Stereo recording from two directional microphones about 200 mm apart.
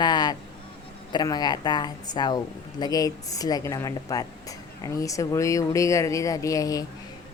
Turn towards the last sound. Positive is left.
turn(degrees=15)  # may be behind; listen again after turning